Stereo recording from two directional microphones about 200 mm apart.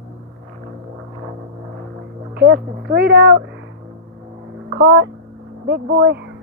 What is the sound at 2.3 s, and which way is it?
Speech, 55° right (ahead or behind).